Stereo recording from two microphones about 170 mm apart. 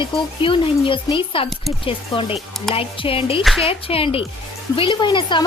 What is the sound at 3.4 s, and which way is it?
Speech, centre (ahead or behind).